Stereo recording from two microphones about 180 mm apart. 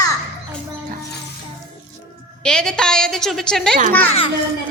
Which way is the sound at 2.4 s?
5° left (ahead or behind).